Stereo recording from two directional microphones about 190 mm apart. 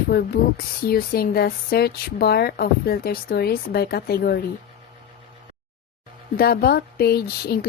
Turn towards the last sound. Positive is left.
turn(degrees=55)  # may be behind; listen again after turning